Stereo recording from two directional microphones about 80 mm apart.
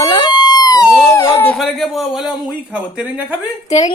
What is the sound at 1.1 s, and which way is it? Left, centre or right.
Speech, left.